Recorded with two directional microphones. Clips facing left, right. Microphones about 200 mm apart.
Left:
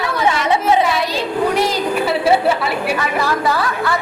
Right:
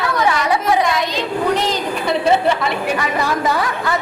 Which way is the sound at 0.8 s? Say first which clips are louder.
Left 1 dB; 10° left (ahead or behind).